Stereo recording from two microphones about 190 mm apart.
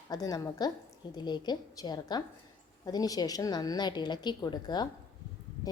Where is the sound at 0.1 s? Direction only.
20° left (ahead or behind).